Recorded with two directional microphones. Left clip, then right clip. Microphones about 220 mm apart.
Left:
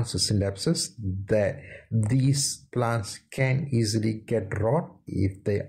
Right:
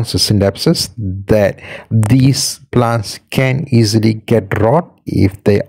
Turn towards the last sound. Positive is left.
turn(degrees=-40)  # may be behind; listen again after turning